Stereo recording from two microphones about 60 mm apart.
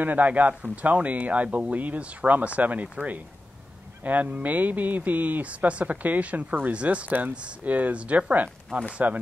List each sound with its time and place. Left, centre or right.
0.0 s speech: right
7.1 s speech: right